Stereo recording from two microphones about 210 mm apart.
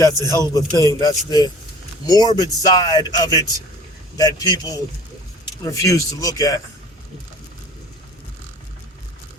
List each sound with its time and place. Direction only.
0.0 s a man's voice: 15° left (ahead or behind)